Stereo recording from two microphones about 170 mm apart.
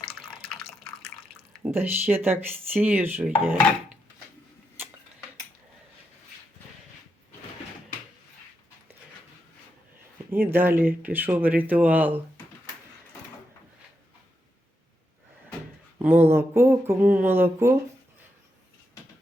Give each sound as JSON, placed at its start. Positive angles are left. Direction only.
{"t": 0.0, "sound": "water", "side_deg": 0}
{"t": 1.6, "sound": "speech", "side_deg": -10}
{"t": 10.3, "sound": "speech", "side_deg": -10}
{"t": 16.0, "sound": "speech", "side_deg": -10}